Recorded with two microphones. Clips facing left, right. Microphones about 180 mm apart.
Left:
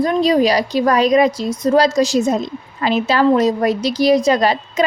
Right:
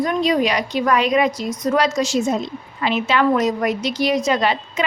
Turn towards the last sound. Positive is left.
turn(degrees=40)  # may be behind; listen again after turning